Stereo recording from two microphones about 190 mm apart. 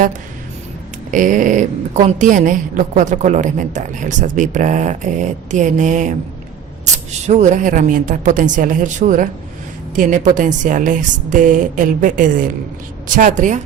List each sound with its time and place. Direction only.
1.1 s a woman's voice: 45° right (ahead or behind)